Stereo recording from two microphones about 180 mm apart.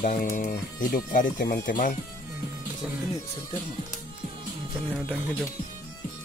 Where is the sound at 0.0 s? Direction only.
45° left (ahead or behind).